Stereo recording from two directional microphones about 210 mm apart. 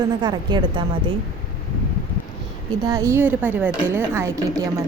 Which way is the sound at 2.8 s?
15° right (ahead or behind).